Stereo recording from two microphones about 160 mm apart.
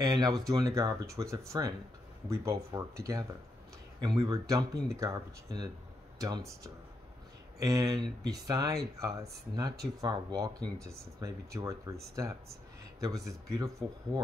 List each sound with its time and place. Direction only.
0.0 s speech: 25° right (ahead or behind)
13.0 s speech: 20° right (ahead or behind)